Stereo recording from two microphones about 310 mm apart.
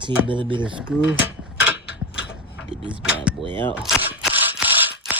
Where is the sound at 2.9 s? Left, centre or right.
Centre.